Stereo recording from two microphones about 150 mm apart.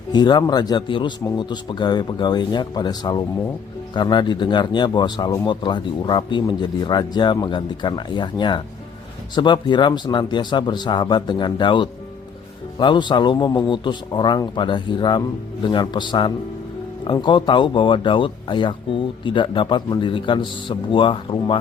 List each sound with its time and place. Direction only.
0.1 s speech: 30° left (ahead or behind)